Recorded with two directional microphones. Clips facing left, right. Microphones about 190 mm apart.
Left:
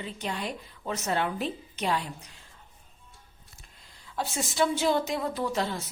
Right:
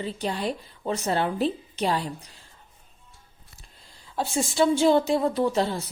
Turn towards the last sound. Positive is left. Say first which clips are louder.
# right 6 dB
turn(degrees=-30)  # may be behind; listen again after turning